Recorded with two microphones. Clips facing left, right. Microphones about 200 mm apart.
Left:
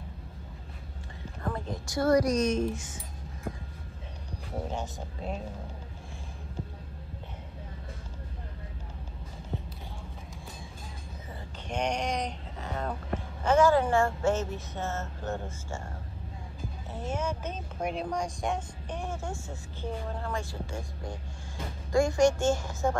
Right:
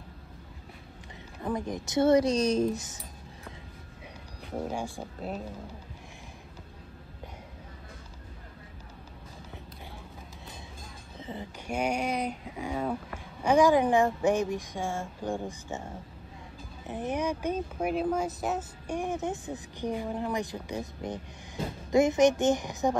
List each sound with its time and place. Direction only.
1.4 s a woman's voice: 15° right (ahead or behind); by 3.0 s 40° right (ahead or behind)
4.5 s speech: 10° right (ahead or behind)
11.6 s speech: 10° right (ahead or behind)
16.8 s speech: 15° right (ahead or behind)